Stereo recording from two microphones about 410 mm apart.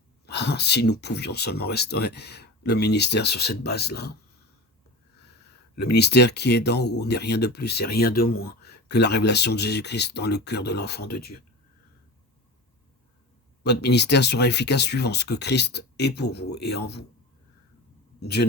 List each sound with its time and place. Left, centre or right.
0.3 s speech: left
5.7 s speech: left
13.7 s speech: left
16.5 s a man's voice: left
16.7 s speech: left
18.2 s a man's voice: left